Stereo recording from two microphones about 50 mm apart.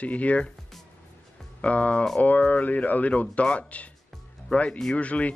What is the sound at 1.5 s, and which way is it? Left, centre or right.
A man's voice, left.